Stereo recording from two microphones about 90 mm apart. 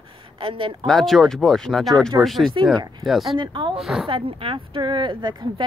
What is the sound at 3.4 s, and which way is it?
Speech, 60° right (ahead or behind).